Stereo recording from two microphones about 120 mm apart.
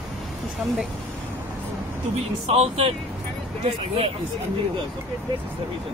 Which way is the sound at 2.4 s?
60° right (ahead or behind).